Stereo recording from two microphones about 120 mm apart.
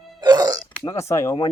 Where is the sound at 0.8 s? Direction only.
25° left (ahead or behind).